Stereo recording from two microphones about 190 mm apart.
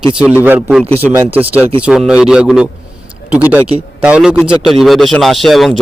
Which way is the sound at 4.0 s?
5° right (ahead or behind).